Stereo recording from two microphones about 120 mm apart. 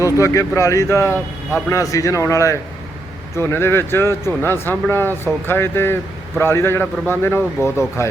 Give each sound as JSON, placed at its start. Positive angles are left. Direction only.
{"t": 0.0, "sound": "speech", "side_deg": 25}